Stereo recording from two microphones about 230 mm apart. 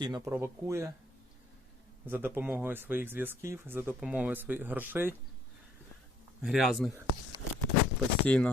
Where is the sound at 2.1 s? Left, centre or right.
Centre.